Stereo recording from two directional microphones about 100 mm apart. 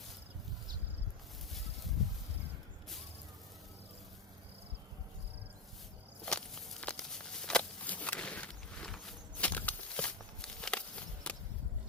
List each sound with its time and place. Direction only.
6.2 s walk: 10° left (ahead or behind)